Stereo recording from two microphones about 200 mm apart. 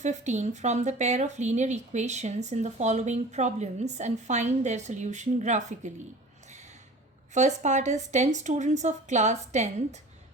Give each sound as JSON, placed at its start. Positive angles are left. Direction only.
{"t": 0.0, "sound": "speech", "side_deg": -35}
{"t": 7.3, "sound": "speech", "side_deg": -35}